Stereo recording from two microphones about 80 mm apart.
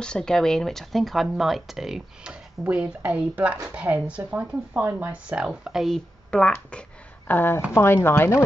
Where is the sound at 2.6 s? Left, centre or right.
Centre.